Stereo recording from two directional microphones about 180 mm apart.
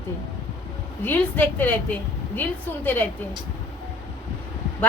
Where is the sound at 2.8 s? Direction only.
10° left (ahead or behind).